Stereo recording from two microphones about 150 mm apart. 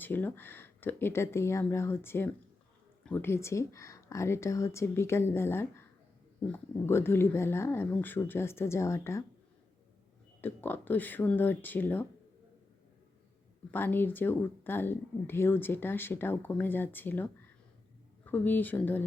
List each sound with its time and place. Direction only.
0.0 s speech: 10° left (ahead or behind)
10.4 s speech: 15° left (ahead or behind)
13.7 s speech: 15° left (ahead or behind)
18.3 s speech: 10° left (ahead or behind)